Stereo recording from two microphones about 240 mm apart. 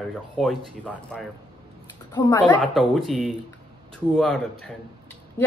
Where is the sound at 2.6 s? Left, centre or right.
Centre.